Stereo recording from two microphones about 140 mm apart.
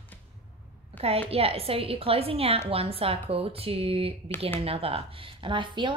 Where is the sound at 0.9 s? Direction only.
45° right (ahead or behind).